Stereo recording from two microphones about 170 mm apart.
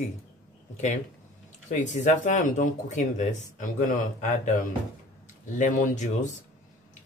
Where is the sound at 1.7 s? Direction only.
45° left (ahead or behind).